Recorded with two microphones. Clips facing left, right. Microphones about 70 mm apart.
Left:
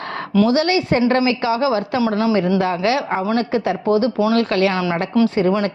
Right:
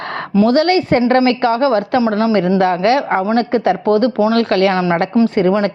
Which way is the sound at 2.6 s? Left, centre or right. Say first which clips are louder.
Right 5 dB; right.